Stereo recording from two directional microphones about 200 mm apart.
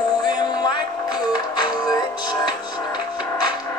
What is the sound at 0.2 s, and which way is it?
Music, 20° left (ahead or behind).